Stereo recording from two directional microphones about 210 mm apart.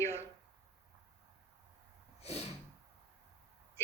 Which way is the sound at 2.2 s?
30° left (ahead or behind).